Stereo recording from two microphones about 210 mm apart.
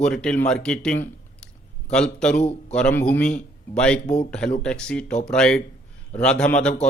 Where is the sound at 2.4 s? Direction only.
30° left (ahead or behind).